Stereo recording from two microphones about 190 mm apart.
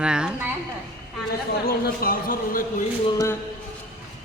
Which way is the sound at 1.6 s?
50° left (ahead or behind).